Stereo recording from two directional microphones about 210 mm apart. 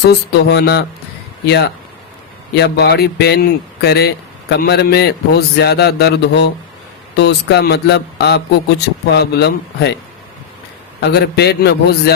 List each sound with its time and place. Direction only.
0.0 s speech: 50° left (ahead or behind)
11.0 s speech: 50° left (ahead or behind)